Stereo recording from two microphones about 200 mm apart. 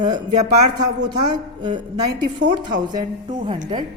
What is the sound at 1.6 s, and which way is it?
Speech, 25° right (ahead or behind).